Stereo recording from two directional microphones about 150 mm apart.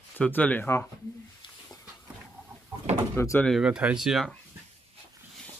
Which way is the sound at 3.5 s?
5° right (ahead or behind).